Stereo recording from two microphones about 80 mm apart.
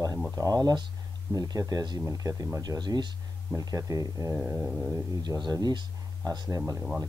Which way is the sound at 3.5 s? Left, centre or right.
Right.